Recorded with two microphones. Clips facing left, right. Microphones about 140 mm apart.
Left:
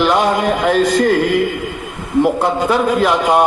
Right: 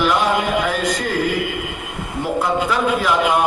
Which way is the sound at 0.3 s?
40° left (ahead or behind).